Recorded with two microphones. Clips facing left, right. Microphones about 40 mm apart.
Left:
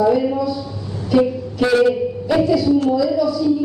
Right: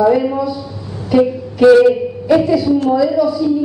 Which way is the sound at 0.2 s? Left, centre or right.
Centre.